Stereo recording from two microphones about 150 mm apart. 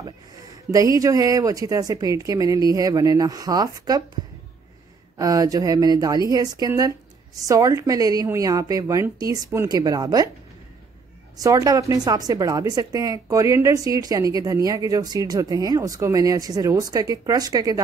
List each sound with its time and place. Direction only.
0.7 s a woman's voice: 20° right (ahead or behind)
5.1 s a woman's voice: 25° right (ahead or behind)
11.3 s a woman's voice: 25° right (ahead or behind)